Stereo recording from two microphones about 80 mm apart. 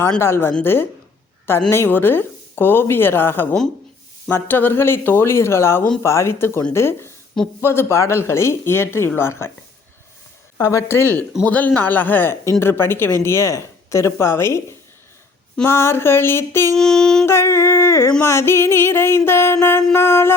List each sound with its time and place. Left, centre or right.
0.2 s a man's voice: left
10.6 s speech: left
10.8 s a man's voice: left
16.7 s a sound: centre
17.2 s speech: left